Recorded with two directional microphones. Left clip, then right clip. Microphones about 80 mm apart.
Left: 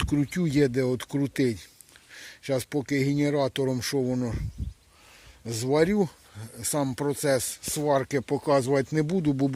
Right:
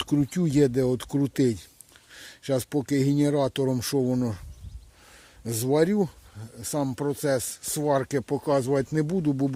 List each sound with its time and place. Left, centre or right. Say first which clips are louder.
0.0 s speech: right 1 dB; right
5.7 s speech: even; right
6.0 s speech: even; centre
7.4 s speech: even; right
8.4 s speech: left 1 dB; centre